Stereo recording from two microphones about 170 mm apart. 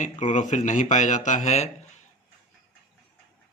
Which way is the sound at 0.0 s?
45° left (ahead or behind).